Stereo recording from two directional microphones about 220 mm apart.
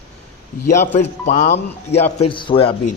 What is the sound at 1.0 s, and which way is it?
A man's voice, 35° left (ahead or behind).